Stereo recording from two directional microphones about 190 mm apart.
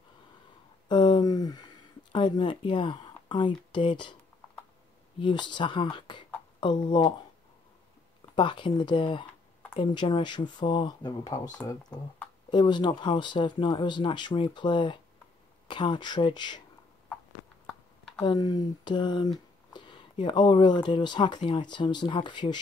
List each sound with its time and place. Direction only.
0.8 s a sound: 25° left (ahead or behind)
2.1 s speech: 25° left (ahead or behind)
5.2 s speech: 25° left (ahead or behind)
8.4 s speech: 25° left (ahead or behind)
18.2 s speech: 20° left (ahead or behind)